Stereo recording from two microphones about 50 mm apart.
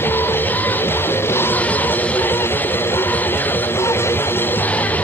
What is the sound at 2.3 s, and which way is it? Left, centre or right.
Music, left.